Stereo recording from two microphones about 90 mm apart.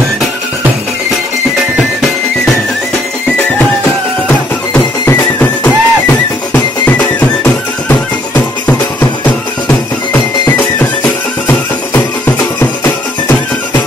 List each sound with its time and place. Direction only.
5.0 s music: 25° left (ahead or behind)
12.5 s music: 30° left (ahead or behind)